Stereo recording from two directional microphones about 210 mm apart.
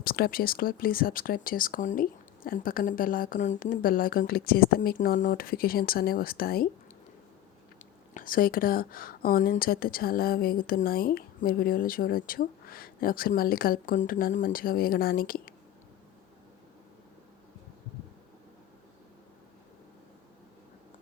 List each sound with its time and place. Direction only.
0.0 s speech: 45° left (ahead or behind)
8.1 s speech: 40° left (ahead or behind)